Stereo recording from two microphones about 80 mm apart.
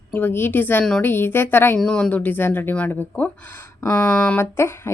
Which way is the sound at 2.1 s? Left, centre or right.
Left.